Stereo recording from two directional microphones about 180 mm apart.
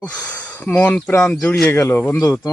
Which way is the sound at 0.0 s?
5° left (ahead or behind).